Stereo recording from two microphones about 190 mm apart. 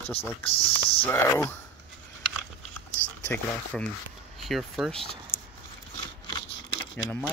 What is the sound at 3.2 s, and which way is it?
Speech, 10° left (ahead or behind).